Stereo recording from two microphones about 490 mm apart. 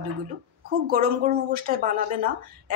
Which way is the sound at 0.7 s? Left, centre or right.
Centre.